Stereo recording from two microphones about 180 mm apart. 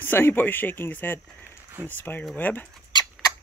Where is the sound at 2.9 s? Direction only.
20° left (ahead or behind).